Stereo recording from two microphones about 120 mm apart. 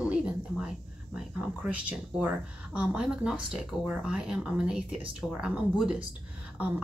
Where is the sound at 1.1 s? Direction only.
10° right (ahead or behind).